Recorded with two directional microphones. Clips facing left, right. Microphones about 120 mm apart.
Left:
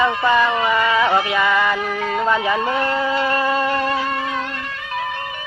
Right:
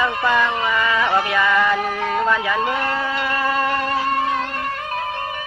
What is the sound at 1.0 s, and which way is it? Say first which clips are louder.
Speech: left 1 dB; 15° left (ahead or behind).